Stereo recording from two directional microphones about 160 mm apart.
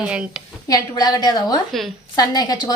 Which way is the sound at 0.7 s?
25° left (ahead or behind).